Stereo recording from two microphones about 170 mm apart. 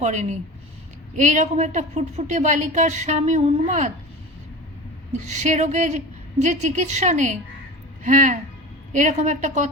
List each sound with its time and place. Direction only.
0.0 s a woman's voice: 45° right (ahead or behind)
5.1 s a woman's voice: 45° right (ahead or behind)